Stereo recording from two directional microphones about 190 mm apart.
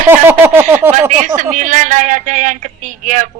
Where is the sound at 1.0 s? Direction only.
40° right (ahead or behind).